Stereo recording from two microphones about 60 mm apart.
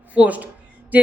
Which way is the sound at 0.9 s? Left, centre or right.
Right.